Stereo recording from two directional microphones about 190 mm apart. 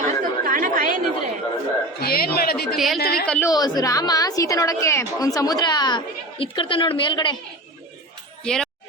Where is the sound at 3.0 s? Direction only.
55° left (ahead or behind).